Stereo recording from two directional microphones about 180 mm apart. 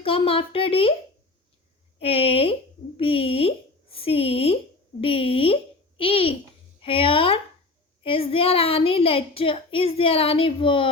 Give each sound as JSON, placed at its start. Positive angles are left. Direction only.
{"t": 0.0, "sound": "a woman's voice", "side_deg": 30}
{"t": 2.0, "sound": "a woman's voice", "side_deg": 30}